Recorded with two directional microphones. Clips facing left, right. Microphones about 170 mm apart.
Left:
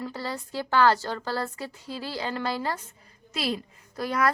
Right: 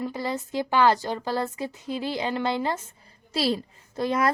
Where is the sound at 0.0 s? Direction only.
20° right (ahead or behind).